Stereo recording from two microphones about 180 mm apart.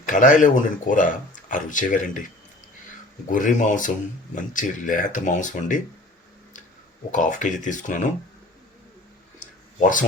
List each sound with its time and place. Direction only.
0.0 s speech: 45° left (ahead or behind)
3.2 s speech: 45° left (ahead or behind)
7.1 s speech: 45° left (ahead or behind)
9.8 s speech: 45° left (ahead or behind)